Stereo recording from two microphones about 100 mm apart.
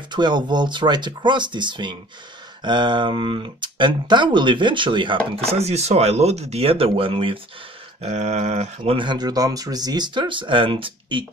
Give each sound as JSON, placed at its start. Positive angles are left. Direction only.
{"t": 0.1, "sound": "speech", "side_deg": -50}
{"t": 5.4, "sound": "speech", "side_deg": -90}
{"t": 8.0, "sound": "speech", "side_deg": -90}
{"t": 9.0, "sound": "speech", "side_deg": -45}